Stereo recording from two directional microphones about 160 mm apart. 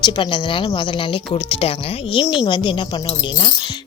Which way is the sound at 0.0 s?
30° left (ahead or behind).